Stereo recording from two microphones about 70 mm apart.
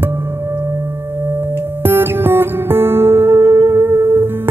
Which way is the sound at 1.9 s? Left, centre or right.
Right.